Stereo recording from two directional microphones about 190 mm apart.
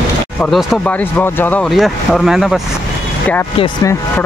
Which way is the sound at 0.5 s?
Centre (ahead or behind).